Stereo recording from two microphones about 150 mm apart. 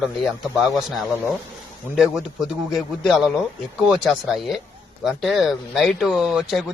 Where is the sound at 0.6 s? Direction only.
5° right (ahead or behind).